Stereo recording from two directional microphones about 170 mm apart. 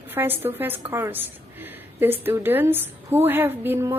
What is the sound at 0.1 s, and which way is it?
A woman's voice, 10° right (ahead or behind).